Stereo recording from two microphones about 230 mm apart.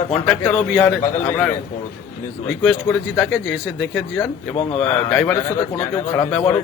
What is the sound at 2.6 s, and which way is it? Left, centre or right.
Speech, centre.